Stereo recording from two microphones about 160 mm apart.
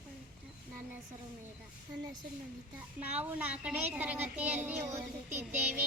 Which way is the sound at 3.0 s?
10° right (ahead or behind).